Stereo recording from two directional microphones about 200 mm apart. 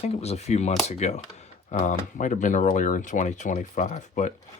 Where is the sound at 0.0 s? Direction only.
30° left (ahead or behind).